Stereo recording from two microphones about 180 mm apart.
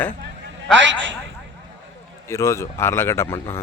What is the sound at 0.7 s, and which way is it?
Speech, 90° right.